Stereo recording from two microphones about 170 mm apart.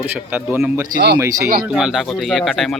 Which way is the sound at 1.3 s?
60° right (ahead or behind).